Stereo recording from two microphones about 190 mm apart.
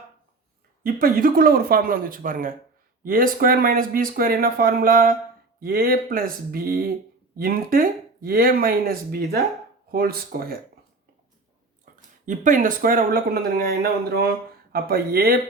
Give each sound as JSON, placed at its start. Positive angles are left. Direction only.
{"t": 0.9, "sound": "speech", "side_deg": -50}
{"t": 11.9, "sound": "a sound", "side_deg": -45}
{"t": 12.2, "sound": "speech", "side_deg": -45}